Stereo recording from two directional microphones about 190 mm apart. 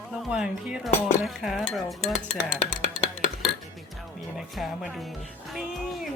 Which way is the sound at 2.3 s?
30° left (ahead or behind).